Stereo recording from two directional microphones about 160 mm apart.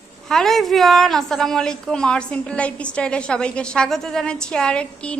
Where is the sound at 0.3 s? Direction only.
Centre (ahead or behind).